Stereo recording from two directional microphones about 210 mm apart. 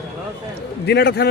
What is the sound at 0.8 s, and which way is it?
Speech, 55° left (ahead or behind).